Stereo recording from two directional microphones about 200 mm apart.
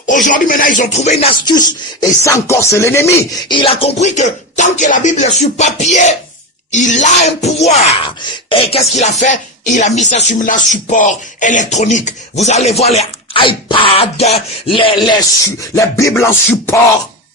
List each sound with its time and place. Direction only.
0.0 s speech: 40° left (ahead or behind); by 3.6 s 15° left (ahead or behind)
3.6 s speech: 30° left (ahead or behind)
15.7 s music: 15° left (ahead or behind)